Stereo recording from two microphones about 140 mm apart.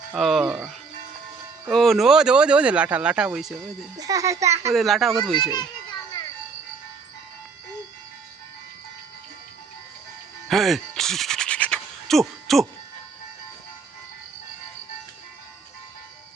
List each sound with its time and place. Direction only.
0.1 s speech: centre (ahead or behind)
3.9 s a child's voice: 25° right (ahead or behind)
4.7 s speech: centre (ahead or behind)
5.4 s children playing: 30° left (ahead or behind)
10.5 s music: centre (ahead or behind)